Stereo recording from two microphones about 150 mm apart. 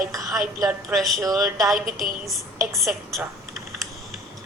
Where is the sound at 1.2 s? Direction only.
25° right (ahead or behind).